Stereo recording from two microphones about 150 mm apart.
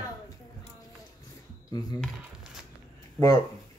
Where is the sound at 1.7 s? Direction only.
25° left (ahead or behind).